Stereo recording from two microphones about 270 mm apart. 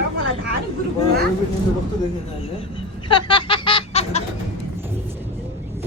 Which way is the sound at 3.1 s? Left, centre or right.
Centre.